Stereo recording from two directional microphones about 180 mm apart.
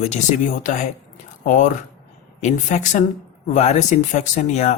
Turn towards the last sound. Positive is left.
turn(degrees=40)  # may be behind; listen again after turning